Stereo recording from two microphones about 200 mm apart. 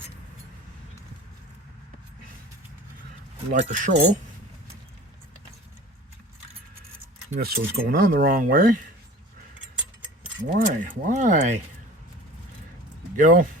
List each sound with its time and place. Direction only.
3.5 s speech: 40° right (ahead or behind)
7.3 s speech: 50° right (ahead or behind)
10.7 s speech: 40° right (ahead or behind)
13.1 s speech: 40° right (ahead or behind)